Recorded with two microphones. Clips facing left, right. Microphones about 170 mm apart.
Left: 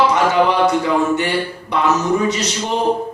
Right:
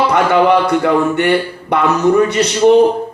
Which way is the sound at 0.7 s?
60° right (ahead or behind).